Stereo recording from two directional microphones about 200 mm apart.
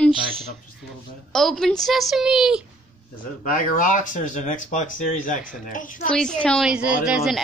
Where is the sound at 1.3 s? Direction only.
Centre (ahead or behind).